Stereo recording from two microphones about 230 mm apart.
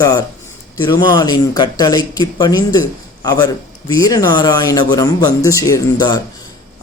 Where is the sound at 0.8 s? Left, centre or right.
Centre.